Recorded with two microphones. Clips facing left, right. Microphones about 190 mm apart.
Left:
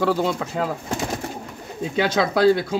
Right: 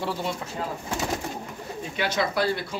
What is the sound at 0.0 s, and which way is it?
Speech, 90° left.